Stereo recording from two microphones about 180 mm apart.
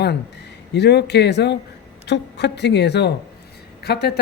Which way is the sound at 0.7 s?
70° left (ahead or behind).